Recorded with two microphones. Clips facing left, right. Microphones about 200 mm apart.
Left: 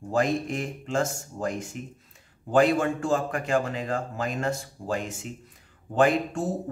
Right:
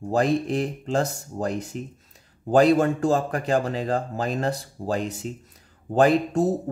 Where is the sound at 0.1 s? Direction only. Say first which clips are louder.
Right 3 dB; 35° right (ahead or behind).